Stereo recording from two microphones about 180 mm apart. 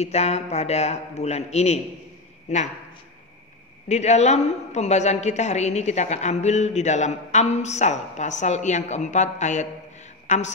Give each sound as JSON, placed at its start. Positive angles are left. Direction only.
{"t": 0.0, "sound": "a woman's voice", "side_deg": 35}
{"t": 3.9, "sound": "a woman's voice", "side_deg": 40}